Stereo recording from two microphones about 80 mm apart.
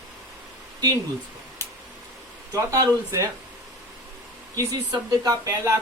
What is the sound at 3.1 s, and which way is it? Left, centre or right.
Speech, right.